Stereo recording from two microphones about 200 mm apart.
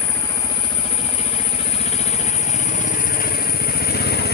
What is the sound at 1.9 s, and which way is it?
Vehicle, 30° left (ahead or behind).